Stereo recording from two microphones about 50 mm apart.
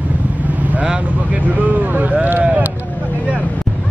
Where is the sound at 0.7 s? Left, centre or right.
Right.